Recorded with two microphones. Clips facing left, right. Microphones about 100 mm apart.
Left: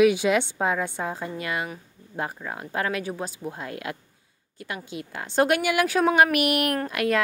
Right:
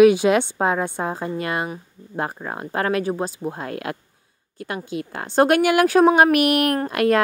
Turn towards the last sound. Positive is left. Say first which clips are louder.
# right 5 dB
turn(degrees=-45)  # may be behind; listen again after turning